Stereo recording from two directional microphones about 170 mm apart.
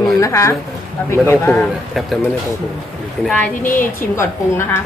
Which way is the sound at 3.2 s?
5° left (ahead or behind).